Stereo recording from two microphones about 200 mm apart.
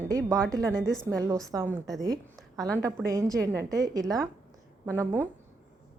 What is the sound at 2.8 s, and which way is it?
A woman's voice, 15° right (ahead or behind).